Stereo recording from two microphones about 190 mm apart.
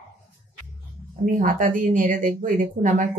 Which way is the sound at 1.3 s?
45° right (ahead or behind).